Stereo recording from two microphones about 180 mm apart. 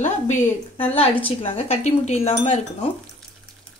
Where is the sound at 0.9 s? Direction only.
30° left (ahead or behind).